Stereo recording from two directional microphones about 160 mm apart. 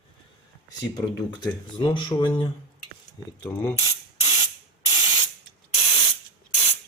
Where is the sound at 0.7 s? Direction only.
25° left (ahead or behind).